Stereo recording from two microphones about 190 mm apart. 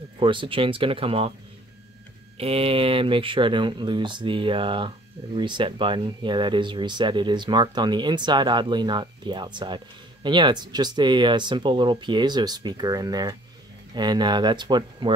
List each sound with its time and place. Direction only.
0.2 s speech: 25° right (ahead or behind)
2.3 s speech: 30° right (ahead or behind)